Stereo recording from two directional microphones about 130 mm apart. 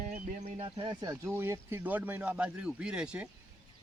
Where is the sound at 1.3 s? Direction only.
20° right (ahead or behind).